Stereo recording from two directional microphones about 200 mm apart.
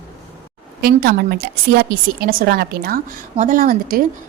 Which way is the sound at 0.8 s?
50° right (ahead or behind).